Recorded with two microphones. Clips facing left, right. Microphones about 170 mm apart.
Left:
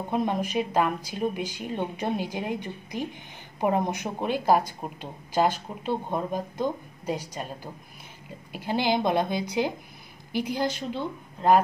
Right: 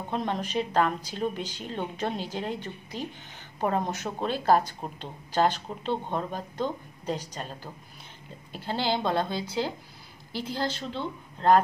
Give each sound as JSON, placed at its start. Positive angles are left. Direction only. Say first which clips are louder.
{"t": 0.1, "sound": "speech", "louder": "left 3 dB", "side_deg": 10}